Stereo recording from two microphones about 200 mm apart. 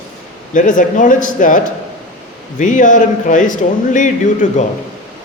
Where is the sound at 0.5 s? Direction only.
40° left (ahead or behind).